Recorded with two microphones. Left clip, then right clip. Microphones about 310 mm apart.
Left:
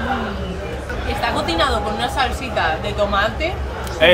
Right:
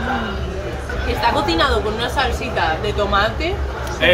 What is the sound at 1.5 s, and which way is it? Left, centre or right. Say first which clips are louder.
Speech: right 1 dB; centre.